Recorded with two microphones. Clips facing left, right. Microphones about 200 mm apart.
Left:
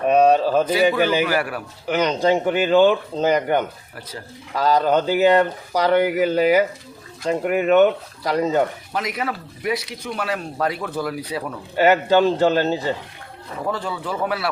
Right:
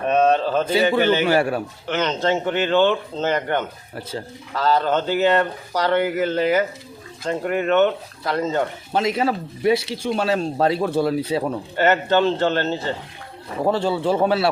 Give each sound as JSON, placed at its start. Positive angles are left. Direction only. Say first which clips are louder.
{"t": 0.1, "sound": "speech", "louder": "left 2 dB", "side_deg": 10}
{"t": 0.7, "sound": "speech", "louder": "even", "side_deg": -25}
{"t": 1.9, "sound": "speech", "louder": "left 3 dB", "side_deg": 10}
{"t": 8.9, "sound": "speech", "louder": "right 5 dB", "side_deg": -25}
{"t": 11.8, "sound": "speech", "louder": "left 2 dB", "side_deg": 10}
{"t": 13.7, "sound": "speech", "louder": "right 7 dB", "side_deg": -30}